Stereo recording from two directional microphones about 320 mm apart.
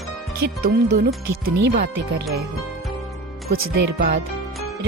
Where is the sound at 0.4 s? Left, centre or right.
Right.